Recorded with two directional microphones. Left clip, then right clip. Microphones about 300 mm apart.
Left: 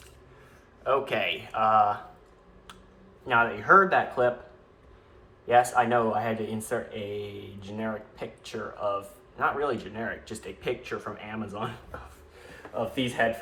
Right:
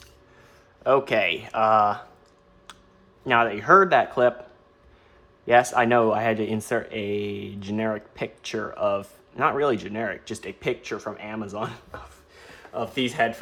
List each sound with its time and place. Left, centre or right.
0.9 s speech: centre
3.2 s speech: right
5.5 s speech: right
12.7 s speech: right